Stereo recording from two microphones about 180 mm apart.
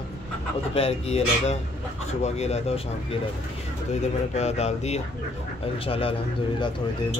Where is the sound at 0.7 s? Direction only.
35° left (ahead or behind).